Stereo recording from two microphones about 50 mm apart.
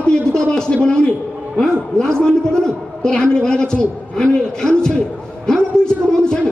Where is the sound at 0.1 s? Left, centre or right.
Centre.